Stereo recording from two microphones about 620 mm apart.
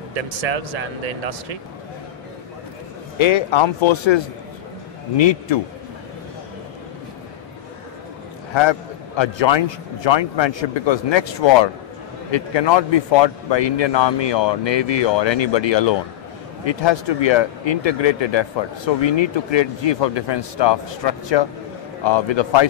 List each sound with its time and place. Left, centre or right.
0.1 s speech: right
3.2 s a man's voice: left
8.5 s a man's voice: left